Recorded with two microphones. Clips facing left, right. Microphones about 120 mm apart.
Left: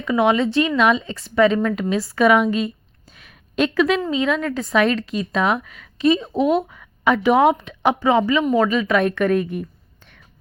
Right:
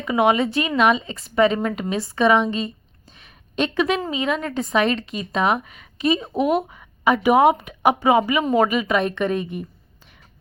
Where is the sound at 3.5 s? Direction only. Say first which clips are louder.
Left 3 dB; centre (ahead or behind).